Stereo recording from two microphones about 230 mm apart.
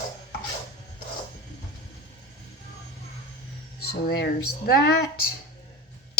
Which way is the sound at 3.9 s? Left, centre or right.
Left.